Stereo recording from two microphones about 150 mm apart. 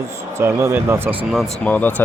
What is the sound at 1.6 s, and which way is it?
Speech, 10° left (ahead or behind).